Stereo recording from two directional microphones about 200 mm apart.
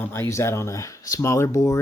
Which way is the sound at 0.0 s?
10° left (ahead or behind).